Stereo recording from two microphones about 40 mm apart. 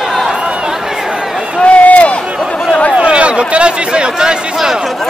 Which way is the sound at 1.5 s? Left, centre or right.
Left.